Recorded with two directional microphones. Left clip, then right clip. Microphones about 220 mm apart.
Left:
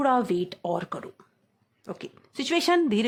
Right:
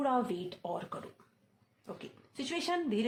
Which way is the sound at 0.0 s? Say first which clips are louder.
Left 9 dB; 45° left (ahead or behind).